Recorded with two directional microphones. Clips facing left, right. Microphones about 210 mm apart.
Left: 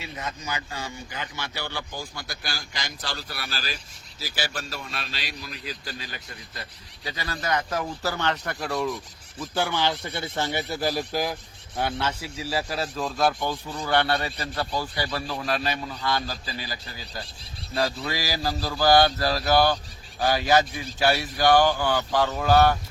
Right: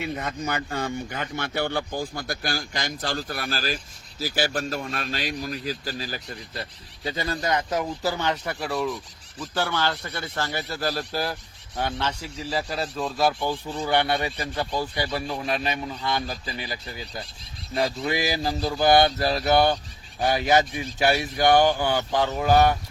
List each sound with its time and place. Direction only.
0.0 s speech: 55° right (ahead or behind); by 6.7 s 35° right (ahead or behind)
7.2 s speech: 20° right (ahead or behind); by 9.0 s 5° right (ahead or behind)
9.4 s a man's voice: 15° left (ahead or behind); by 16.7 s 20° right (ahead or behind)
17.8 s a man's voice: 20° right (ahead or behind)